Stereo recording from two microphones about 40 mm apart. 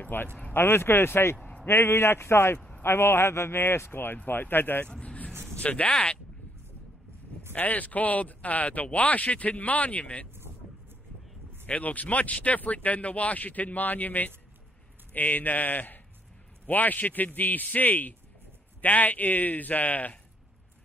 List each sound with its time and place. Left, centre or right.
0.0 s speech: left
0.5 s speech: left
1.7 s a man's voice: left
4.8 s vehicle: left
5.5 s speech: left
7.5 s speech: left
11.6 s a man's voice: left